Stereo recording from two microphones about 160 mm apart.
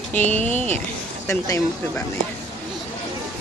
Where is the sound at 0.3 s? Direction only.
10° left (ahead or behind).